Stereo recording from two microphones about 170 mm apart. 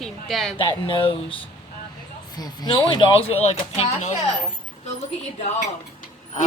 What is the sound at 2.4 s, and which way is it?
Speech, 30° left (ahead or behind).